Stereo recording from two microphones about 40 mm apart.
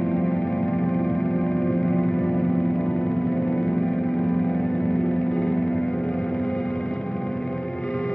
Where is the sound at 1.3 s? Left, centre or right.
Left.